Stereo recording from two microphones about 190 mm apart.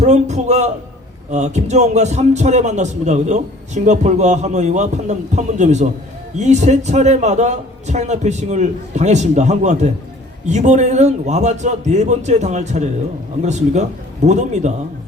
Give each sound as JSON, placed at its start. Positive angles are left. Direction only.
{"t": 0.0, "sound": "a man's voice", "side_deg": -35}